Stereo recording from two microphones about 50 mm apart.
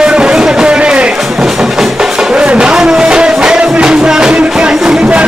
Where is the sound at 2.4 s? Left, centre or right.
Right.